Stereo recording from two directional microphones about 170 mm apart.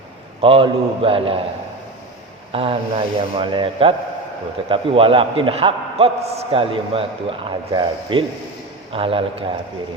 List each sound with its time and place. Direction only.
0.4 s a man's voice: 35° right (ahead or behind)
2.5 s a man's voice: 35° right (ahead or behind)